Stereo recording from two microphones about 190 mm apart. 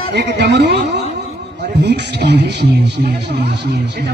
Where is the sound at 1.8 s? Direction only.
60° right (ahead or behind).